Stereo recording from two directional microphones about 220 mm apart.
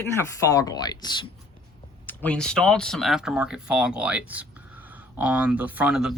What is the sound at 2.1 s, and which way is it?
Speech, 5° left (ahead or behind).